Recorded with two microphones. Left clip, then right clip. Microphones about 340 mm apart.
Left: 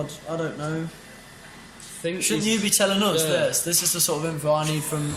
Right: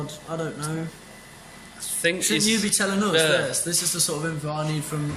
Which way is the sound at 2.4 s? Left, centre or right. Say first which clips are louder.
Left 2 dB; centre.